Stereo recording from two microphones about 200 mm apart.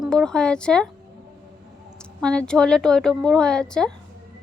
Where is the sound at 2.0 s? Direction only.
5° left (ahead or behind).